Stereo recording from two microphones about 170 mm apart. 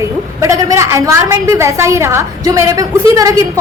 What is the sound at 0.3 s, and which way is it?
A woman's voice, 20° right (ahead or behind).